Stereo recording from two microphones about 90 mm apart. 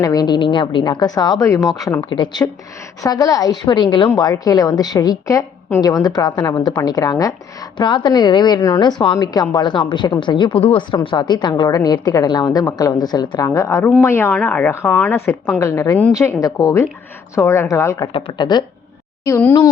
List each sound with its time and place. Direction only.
0.0 s a woman's voice: 50° left (ahead or behind)
2.0 s a woman's voice: 60° left (ahead or behind)
3.0 s a woman's voice: 40° left (ahead or behind)
3.7 s a woman's voice: 55° left (ahead or behind)
4.2 s a woman's voice: 45° left (ahead or behind)
5.8 s a woman's voice: 50° left (ahead or behind)
7.8 s a woman's voice: 55° left (ahead or behind); by 10.8 s 90° left
11.0 s a woman's voice: 60° left (ahead or behind); by 14.3 s 30° left (ahead or behind)
14.3 s speech: 15° left (ahead or behind)
15.5 s a woman's voice: 35° left (ahead or behind)
17.3 s a woman's voice: 30° left (ahead or behind)
18.3 s a woman's voice: 50° left (ahead or behind)